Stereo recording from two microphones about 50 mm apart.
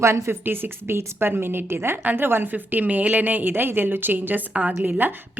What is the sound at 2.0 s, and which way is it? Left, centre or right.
Speech, right.